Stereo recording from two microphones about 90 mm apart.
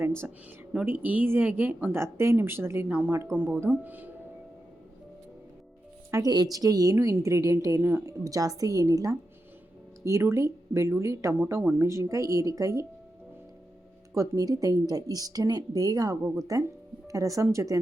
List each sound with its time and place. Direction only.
0.0 s a woman's voice: 25° right (ahead or behind)
6.2 s speech: 45° right (ahead or behind)
6.9 s a woman's voice: 30° right (ahead or behind)
14.1 s a woman's voice: 40° right (ahead or behind)